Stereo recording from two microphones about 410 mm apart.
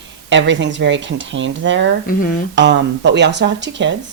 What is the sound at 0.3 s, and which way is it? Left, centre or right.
Speech, right.